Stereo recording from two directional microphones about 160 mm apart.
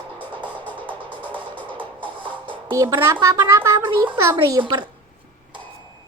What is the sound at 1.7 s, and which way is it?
Music, 30° right (ahead or behind).